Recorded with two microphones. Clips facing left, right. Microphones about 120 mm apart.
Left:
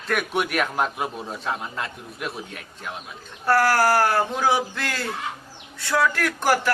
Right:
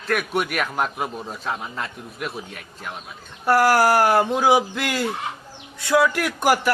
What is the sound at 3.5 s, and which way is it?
Speech, 15° right (ahead or behind).